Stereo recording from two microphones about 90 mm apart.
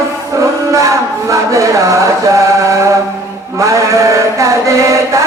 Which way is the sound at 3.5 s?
35° right (ahead or behind).